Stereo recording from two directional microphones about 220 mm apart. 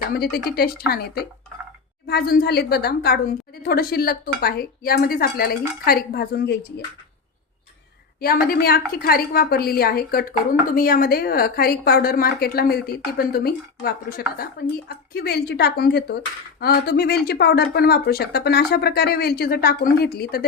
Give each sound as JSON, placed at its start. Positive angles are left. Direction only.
{"t": 0.1, "sound": "a woman's voice", "side_deg": 45}
{"t": 8.2, "sound": "a woman's voice", "side_deg": 45}